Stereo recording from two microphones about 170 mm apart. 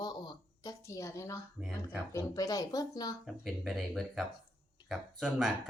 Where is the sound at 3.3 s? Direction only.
Centre (ahead or behind).